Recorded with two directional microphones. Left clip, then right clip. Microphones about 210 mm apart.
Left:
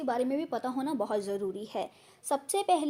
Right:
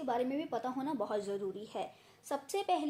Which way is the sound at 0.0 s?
35° left (ahead or behind).